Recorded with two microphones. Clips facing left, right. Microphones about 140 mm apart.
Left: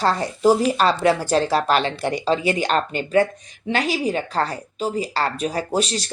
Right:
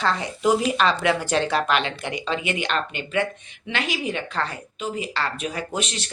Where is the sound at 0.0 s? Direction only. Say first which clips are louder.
Left 4 dB; 40° left (ahead or behind).